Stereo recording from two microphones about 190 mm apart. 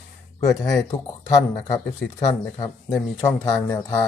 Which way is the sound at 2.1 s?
15° left (ahead or behind).